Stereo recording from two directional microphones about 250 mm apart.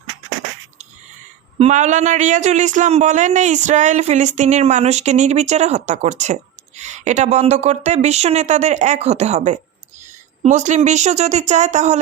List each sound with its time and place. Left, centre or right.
1.5 s speech: right